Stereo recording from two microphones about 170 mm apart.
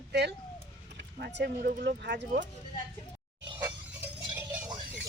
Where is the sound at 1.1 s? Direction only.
65° right (ahead or behind).